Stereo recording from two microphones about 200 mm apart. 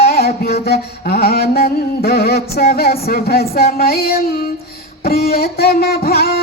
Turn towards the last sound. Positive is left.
turn(degrees=50)  # may be behind; listen again after turning